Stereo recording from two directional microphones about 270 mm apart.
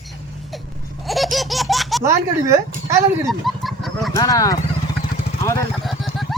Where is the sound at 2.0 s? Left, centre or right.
Centre.